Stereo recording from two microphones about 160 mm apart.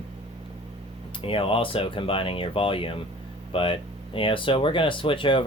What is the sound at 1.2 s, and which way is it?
Speech, 35° left (ahead or behind).